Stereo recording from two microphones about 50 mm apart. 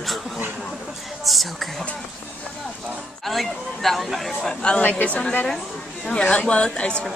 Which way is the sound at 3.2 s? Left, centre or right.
Centre.